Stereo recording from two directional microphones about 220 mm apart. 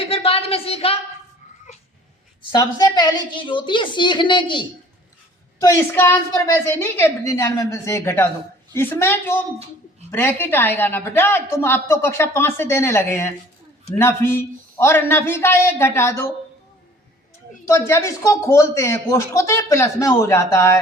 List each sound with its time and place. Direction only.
0.0 s a sound: 25° left (ahead or behind)
2.4 s a woman's voice: 20° left (ahead or behind)
17.7 s a woman's voice: 10° left (ahead or behind)